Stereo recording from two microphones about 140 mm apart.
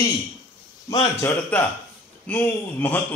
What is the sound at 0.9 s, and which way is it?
Speech, 20° left (ahead or behind).